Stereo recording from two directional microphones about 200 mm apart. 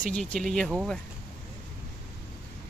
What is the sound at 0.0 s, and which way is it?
Speech, 5° left (ahead or behind).